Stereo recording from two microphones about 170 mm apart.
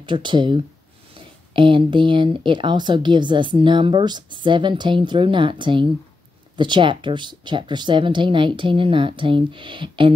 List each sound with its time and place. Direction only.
0.0 s a woman's voice: 30° right (ahead or behind)